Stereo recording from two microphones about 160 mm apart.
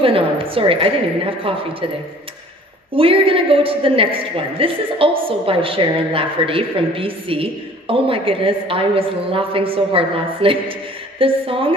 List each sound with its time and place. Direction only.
0.0 s a woman's voice: 35° right (ahead or behind)
2.9 s a woman's voice: 35° right (ahead or behind)